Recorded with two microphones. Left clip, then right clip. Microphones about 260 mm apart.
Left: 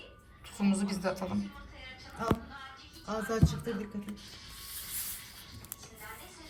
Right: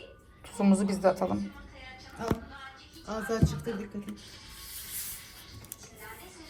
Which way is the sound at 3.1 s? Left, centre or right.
Left.